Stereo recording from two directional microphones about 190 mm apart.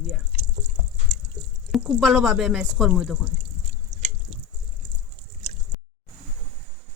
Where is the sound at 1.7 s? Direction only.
Centre (ahead or behind).